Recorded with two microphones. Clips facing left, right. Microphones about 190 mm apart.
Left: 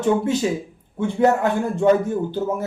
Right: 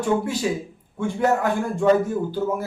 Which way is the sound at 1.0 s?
20° left (ahead or behind).